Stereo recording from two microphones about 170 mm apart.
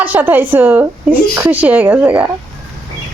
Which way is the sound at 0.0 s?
10° right (ahead or behind).